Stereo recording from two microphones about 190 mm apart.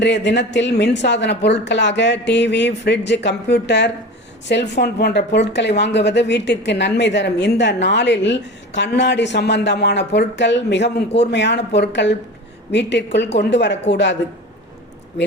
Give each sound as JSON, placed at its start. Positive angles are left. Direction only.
{"t": 0.0, "sound": "a woman's voice", "side_deg": 65}